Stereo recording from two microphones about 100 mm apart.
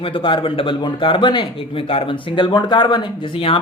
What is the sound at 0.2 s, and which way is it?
Speech, 65° left (ahead or behind).